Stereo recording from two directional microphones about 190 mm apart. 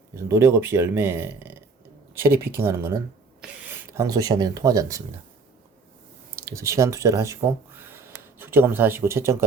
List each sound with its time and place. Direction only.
0.3 s speech: 15° right (ahead or behind)
6.4 s speech: 15° right (ahead or behind)